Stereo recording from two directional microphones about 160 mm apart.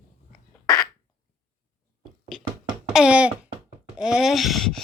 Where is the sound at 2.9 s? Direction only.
5° right (ahead or behind).